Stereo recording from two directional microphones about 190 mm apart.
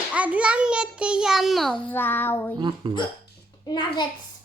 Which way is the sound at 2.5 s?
25° right (ahead or behind).